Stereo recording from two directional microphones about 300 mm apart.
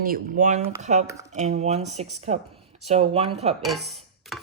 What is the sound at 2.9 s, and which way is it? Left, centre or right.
Speech, centre.